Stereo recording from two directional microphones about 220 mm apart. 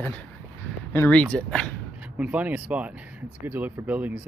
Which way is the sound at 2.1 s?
5° right (ahead or behind).